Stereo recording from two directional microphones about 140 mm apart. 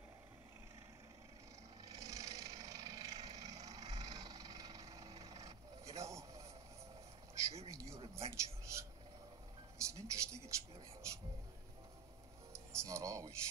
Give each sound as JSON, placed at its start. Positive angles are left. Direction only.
{"t": 1.9, "sound": "vehicle", "side_deg": -25}
{"t": 7.6, "sound": "a sound", "side_deg": -20}
{"t": 9.8, "sound": "music", "side_deg": -20}
{"t": 12.5, "sound": "music", "side_deg": -20}